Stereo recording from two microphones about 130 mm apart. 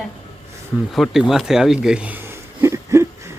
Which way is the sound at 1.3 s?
5° right (ahead or behind).